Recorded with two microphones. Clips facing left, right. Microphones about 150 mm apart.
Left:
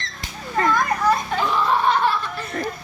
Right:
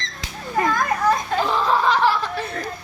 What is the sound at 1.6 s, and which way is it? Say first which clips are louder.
Snicker: right 1 dB; 90° right.